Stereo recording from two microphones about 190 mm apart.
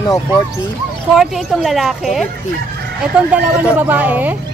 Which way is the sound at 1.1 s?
Centre (ahead or behind).